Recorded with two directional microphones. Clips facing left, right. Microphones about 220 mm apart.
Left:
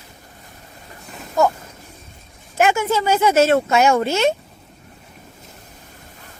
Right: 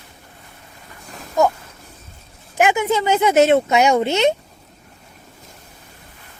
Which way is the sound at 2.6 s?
15° right (ahead or behind).